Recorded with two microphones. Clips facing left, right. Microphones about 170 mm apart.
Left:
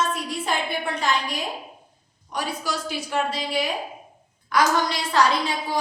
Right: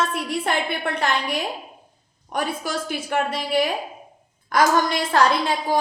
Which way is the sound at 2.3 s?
50° right (ahead or behind).